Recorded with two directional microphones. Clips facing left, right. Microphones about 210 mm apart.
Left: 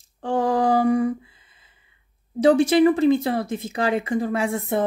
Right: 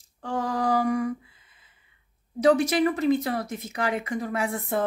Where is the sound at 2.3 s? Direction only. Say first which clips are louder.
Left 5 dB; 30° left (ahead or behind).